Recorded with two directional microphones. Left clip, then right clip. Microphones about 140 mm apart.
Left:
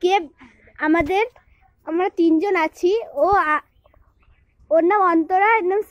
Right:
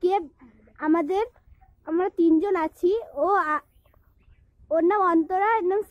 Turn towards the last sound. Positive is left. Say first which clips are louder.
# left 6 dB
turn(degrees=0)  # may be behind; listen again after turning